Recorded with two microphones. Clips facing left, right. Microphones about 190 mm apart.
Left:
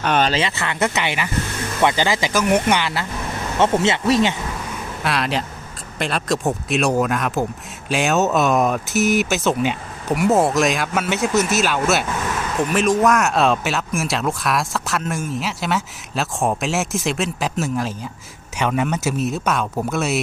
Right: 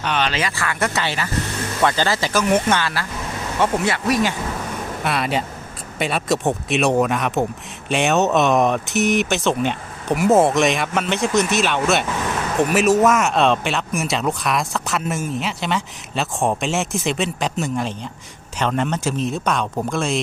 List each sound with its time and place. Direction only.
0.0 s speech: 45° left (ahead or behind)
0.3 s speech: 25° left (ahead or behind)
5.0 s speech: centre (ahead or behind)